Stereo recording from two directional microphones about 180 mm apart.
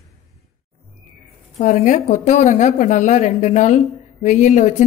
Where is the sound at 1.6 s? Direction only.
40° left (ahead or behind).